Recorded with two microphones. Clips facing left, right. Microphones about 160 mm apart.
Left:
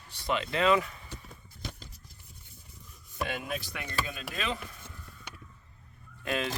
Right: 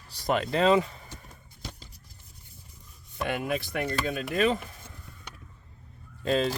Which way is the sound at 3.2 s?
55° right (ahead or behind).